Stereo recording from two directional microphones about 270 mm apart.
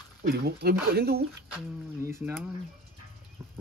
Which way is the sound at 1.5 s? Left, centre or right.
Centre.